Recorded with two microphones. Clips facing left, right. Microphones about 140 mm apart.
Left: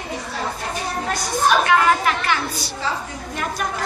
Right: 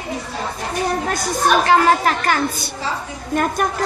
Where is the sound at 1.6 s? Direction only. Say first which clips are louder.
Right 3 dB; 35° right (ahead or behind).